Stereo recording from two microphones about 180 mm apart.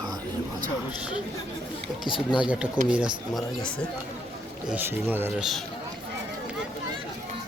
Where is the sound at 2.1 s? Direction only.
5° right (ahead or behind).